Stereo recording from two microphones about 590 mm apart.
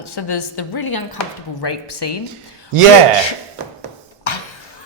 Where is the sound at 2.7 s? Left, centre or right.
Right.